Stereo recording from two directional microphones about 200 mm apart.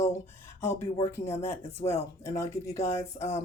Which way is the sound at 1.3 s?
10° left (ahead or behind).